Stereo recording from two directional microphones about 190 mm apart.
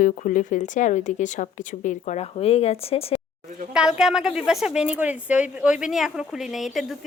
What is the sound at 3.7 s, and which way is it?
Speech, 5° right (ahead or behind).